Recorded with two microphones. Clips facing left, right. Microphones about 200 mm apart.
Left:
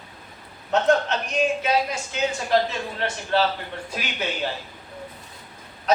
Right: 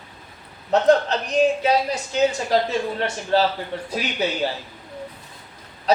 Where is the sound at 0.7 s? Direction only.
35° right (ahead or behind).